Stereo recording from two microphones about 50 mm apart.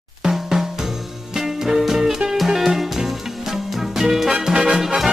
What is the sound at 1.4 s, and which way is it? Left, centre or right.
Music, centre.